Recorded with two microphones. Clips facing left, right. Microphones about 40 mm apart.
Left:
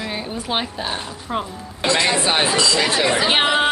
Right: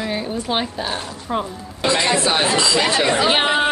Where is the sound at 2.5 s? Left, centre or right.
Centre.